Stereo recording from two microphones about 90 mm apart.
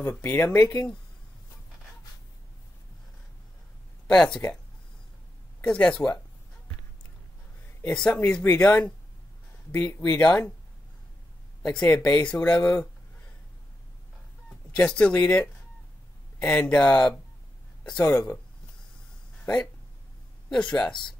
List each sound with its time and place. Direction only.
0.0 s speech: 15° left (ahead or behind)
4.1 s speech: 10° left (ahead or behind)
5.6 s speech: 15° left (ahead or behind)
7.8 s speech: 10° left (ahead or behind)
11.6 s speech: 10° left (ahead or behind)
14.8 s speech: 15° left (ahead or behind)
18.0 s speech: 30° left (ahead or behind)
19.4 s speech: 10° left (ahead or behind)